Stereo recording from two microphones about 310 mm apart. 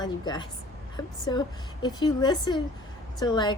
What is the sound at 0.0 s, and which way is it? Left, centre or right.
A woman's voice, centre.